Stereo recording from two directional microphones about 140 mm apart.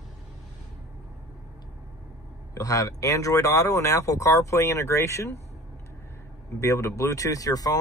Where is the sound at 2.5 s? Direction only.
25° left (ahead or behind).